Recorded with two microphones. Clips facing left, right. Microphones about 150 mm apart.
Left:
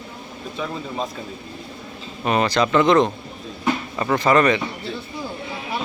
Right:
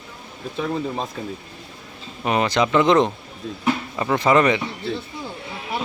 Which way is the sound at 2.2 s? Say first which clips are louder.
Left 1 dB; 15° right (ahead or behind).